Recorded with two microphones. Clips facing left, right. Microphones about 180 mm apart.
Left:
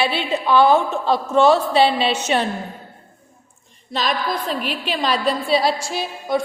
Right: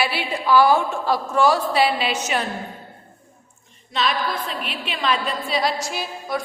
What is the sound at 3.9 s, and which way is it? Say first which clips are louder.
A woman's voice: left 1 dB; 40° left (ahead or behind).